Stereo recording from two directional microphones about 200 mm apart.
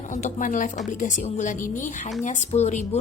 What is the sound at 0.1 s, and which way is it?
A woman's voice, 40° left (ahead or behind).